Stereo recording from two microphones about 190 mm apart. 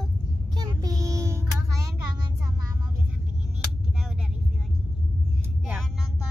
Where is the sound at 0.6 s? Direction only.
20° right (ahead or behind).